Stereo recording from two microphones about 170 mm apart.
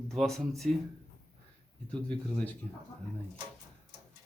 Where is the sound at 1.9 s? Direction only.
10° left (ahead or behind).